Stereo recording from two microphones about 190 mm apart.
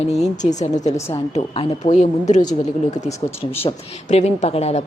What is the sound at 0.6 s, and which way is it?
A woman's voice, 35° left (ahead or behind).